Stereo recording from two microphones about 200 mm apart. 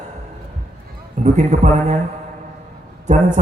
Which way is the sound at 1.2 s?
35° right (ahead or behind).